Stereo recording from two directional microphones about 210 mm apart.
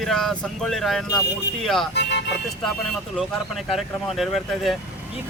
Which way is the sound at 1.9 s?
55° left (ahead or behind).